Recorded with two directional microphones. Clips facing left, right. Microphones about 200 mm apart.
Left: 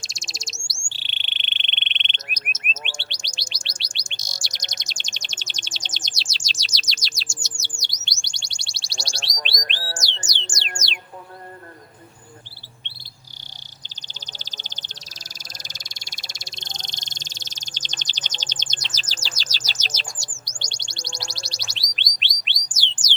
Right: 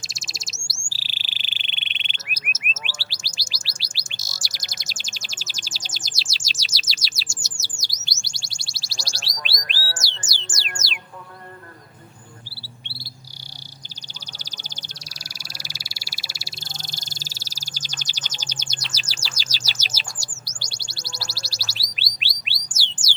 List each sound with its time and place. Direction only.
0.0 s bird: 5° right (ahead or behind)
6.5 s chirp: 5° right (ahead or behind)
9.3 s bird: 20° left (ahead or behind)
10.3 s music: 5° right (ahead or behind)
14.3 s frog: 10° right (ahead or behind)
20.6 s a sound: 5° right (ahead or behind)